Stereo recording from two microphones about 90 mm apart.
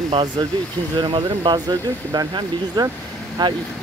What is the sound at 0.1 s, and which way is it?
Speech, 60° right (ahead or behind).